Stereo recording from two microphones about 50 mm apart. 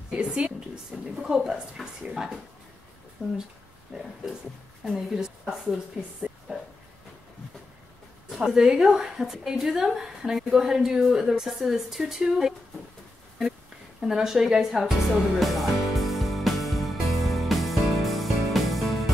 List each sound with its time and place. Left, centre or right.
0.1 s a woman's voice: centre
3.2 s a woman's voice: centre
8.3 s a sound: centre
8.5 s a woman's voice: centre
14.0 s music: centre